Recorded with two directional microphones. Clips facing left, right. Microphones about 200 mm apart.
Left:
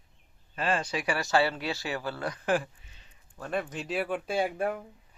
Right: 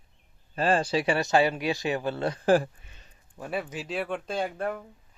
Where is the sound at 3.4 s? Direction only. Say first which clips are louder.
Even; 10° right (ahead or behind); by 4.8 s 10° left (ahead or behind).